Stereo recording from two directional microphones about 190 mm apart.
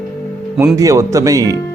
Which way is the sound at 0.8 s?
15° right (ahead or behind).